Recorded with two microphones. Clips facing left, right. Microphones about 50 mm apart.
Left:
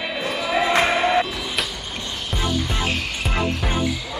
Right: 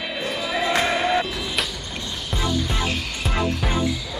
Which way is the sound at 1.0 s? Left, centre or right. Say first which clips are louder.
Left 2 dB; centre.